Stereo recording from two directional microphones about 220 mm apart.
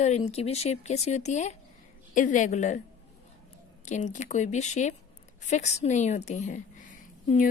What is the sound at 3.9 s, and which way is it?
A woman's voice, 35° left (ahead or behind).